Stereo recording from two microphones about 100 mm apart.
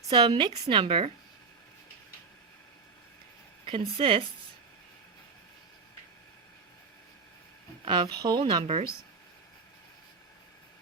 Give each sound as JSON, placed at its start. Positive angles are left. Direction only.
{"t": 0.1, "sound": "speech", "side_deg": -50}
{"t": 0.6, "sound": "speech", "side_deg": -60}
{"t": 3.7, "sound": "speech", "side_deg": -65}
{"t": 8.1, "sound": "speech", "side_deg": -45}
{"t": 8.6, "sound": "speech", "side_deg": -90}